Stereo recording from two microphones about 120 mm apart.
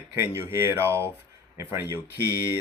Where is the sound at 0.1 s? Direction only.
20° right (ahead or behind).